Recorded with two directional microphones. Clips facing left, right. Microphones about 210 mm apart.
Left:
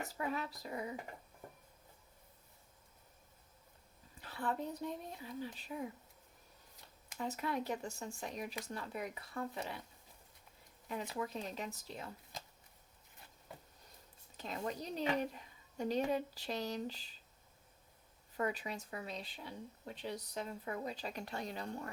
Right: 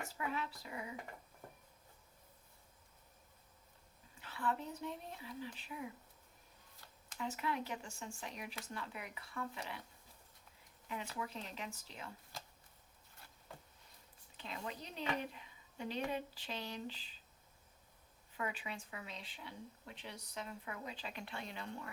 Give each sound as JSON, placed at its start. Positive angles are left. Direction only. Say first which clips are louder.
{"t": 0.0, "sound": "speech", "louder": "left 2 dB", "side_deg": 40}
{"t": 4.2, "sound": "speech", "louder": "left 1 dB", "side_deg": 40}
{"t": 7.2, "sound": "speech", "louder": "left 2 dB", "side_deg": 40}
{"t": 11.2, "sound": "speech", "louder": "left 4 dB", "side_deg": 40}
{"t": 14.3, "sound": "speech", "louder": "left 5 dB", "side_deg": 40}
{"t": 18.3, "sound": "speech", "louder": "left 5 dB", "side_deg": 40}